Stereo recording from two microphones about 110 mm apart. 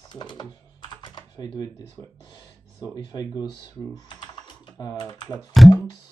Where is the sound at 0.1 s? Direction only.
40° left (ahead or behind).